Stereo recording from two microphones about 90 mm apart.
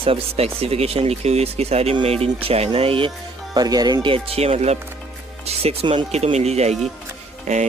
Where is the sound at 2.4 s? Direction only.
90° right.